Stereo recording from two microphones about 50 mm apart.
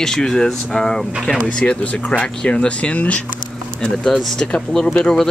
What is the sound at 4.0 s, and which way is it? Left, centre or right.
Speech, centre.